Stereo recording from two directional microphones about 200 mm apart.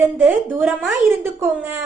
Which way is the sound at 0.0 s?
5° right (ahead or behind).